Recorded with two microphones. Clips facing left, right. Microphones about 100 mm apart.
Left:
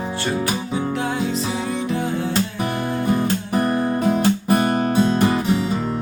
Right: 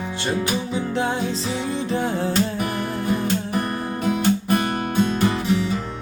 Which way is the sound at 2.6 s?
35° left (ahead or behind).